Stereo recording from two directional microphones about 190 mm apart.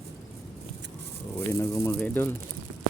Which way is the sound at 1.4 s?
15° left (ahead or behind).